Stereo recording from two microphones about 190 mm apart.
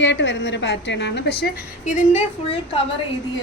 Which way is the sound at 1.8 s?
40° left (ahead or behind).